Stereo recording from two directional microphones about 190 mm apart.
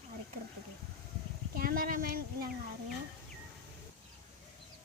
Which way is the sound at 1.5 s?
50° right (ahead or behind).